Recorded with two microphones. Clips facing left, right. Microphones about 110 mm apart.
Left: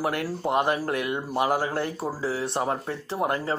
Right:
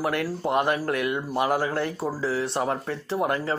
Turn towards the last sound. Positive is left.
turn(degrees=30)  # may be behind; listen again after turning